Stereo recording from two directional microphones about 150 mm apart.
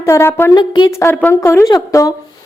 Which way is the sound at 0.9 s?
15° left (ahead or behind).